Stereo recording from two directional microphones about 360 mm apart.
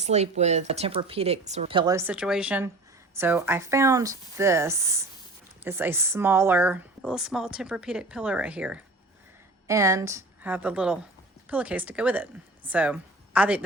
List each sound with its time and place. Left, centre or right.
0.0 s a woman's voice: centre